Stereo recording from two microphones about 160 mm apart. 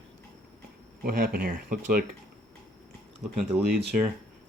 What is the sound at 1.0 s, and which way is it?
Speech, 65° right (ahead or behind).